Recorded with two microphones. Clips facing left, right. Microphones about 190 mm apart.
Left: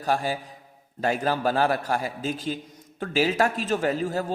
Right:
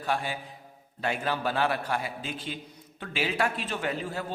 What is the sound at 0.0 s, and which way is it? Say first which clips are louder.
A man's voice: left 5 dB; 40° left (ahead or behind).